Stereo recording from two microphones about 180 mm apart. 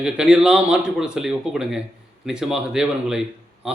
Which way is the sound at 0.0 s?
5° right (ahead or behind).